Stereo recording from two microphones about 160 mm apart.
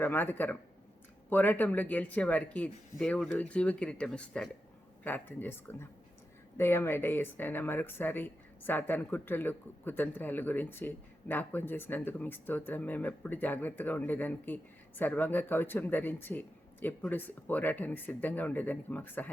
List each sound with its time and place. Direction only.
0.0 s speech: 10° left (ahead or behind)